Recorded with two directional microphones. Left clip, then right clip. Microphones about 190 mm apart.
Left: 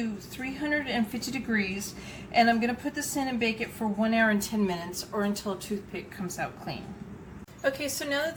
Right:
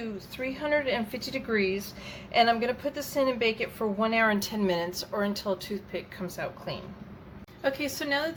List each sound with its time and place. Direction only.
0.6 s a woman's voice: 45° right (ahead or behind)
7.6 s a woman's voice: 20° right (ahead or behind)